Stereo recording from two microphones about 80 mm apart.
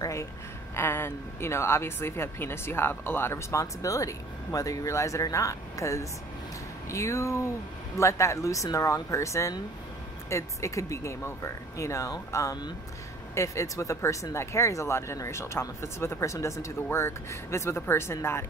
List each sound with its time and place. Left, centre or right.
0.0 s a sound: left
0.7 s speech: left
3.8 s speech: left